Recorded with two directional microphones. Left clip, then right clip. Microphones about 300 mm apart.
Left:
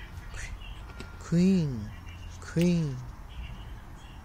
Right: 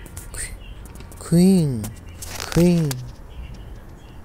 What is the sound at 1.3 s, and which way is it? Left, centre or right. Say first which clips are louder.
Speech: right 10 dB; centre.